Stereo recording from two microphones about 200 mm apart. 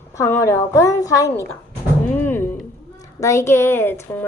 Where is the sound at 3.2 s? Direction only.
15° left (ahead or behind).